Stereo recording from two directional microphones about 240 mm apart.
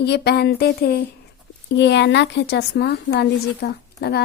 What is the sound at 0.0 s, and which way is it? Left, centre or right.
Speech, left.